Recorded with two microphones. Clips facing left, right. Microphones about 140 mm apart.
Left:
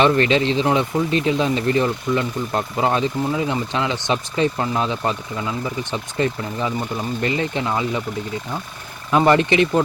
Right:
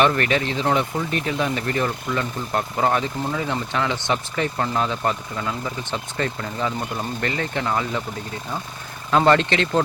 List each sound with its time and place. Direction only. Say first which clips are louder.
0.0 s speech: left 3 dB; 20° left (ahead or behind)
9.0 s speech: left 2 dB; 15° left (ahead or behind)